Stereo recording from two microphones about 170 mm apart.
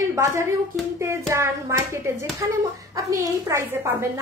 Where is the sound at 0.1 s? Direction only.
20° right (ahead or behind).